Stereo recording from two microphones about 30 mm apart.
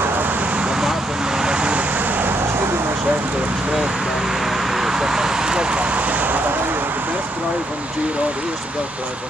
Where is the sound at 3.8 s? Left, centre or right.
Right.